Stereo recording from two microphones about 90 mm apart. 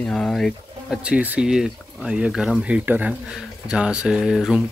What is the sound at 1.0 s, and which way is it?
Speech, 15° right (ahead or behind).